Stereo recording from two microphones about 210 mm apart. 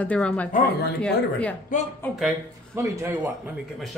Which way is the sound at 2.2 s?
10° right (ahead or behind).